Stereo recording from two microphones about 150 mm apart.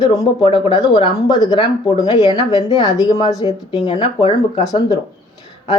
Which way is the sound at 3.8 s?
35° left (ahead or behind).